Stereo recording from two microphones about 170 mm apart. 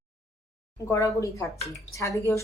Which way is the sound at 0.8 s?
20° left (ahead or behind).